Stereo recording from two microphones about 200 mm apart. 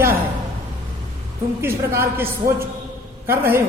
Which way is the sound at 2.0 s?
10° right (ahead or behind).